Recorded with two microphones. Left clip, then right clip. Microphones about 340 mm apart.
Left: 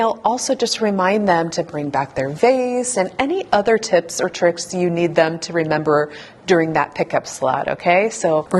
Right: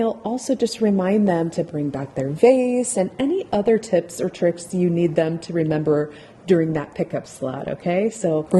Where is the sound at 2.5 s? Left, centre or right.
Left.